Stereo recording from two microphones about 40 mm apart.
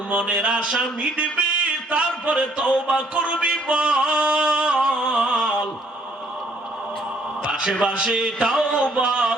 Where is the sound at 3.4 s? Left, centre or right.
Right.